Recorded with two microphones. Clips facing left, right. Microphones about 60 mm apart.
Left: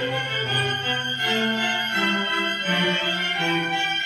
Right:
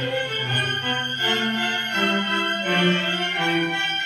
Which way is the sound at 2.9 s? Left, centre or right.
Centre.